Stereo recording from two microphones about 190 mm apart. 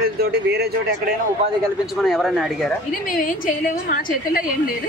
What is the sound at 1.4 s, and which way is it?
Speech, 35° right (ahead or behind).